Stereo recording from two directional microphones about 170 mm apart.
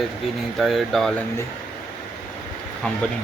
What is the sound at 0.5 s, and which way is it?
Speech, centre (ahead or behind).